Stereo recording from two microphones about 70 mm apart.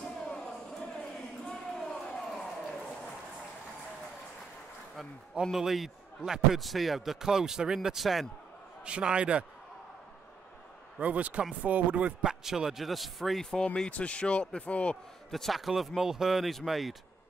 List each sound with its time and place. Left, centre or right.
0.0 s a sound: centre
5.4 s a man's voice: centre
8.8 s a man's voice: centre
11.0 s a man's voice: centre
15.3 s a man's voice: centre